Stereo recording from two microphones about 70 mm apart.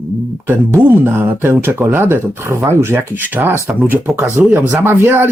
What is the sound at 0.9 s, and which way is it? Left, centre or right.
Speech, right.